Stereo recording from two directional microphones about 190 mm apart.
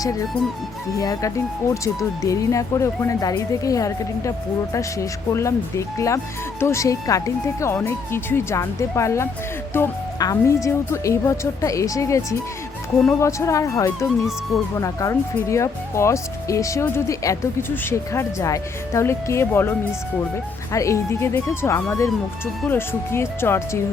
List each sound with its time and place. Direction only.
0.9 s speech: 20° left (ahead or behind)